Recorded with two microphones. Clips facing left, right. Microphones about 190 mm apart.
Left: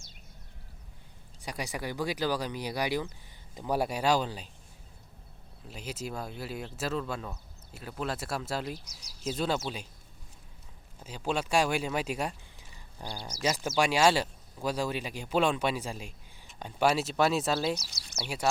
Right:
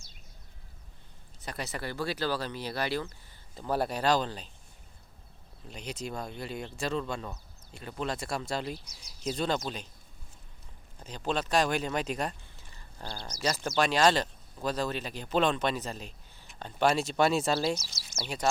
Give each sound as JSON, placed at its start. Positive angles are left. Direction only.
{"t": 1.4, "sound": "speech", "side_deg": 10}
{"t": 5.6, "sound": "speech", "side_deg": 5}
{"t": 11.0, "sound": "speech", "side_deg": 5}